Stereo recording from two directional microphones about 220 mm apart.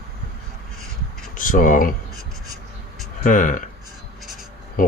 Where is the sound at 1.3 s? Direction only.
35° left (ahead or behind).